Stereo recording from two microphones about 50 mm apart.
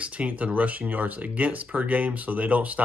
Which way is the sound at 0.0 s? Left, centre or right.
Right.